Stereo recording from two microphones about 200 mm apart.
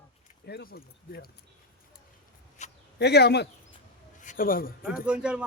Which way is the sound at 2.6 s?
35° left (ahead or behind).